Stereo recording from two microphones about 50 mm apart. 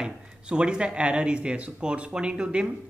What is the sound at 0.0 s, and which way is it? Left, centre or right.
Speech, centre.